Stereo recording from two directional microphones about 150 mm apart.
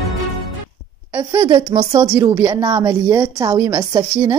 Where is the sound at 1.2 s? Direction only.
30° right (ahead or behind).